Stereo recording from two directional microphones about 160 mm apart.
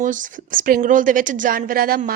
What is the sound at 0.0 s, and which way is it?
Speech, 55° right (ahead or behind).